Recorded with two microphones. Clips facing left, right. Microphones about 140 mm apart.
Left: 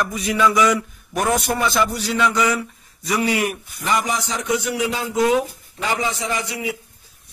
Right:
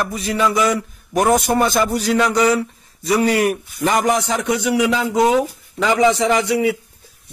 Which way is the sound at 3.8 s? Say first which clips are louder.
Right 5 dB; 55° right (ahead or behind).